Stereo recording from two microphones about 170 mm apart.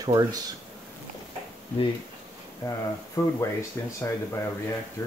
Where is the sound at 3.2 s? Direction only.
20° left (ahead or behind).